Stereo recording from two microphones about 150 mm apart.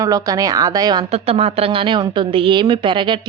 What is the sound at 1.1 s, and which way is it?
A woman's voice, 40° right (ahead or behind).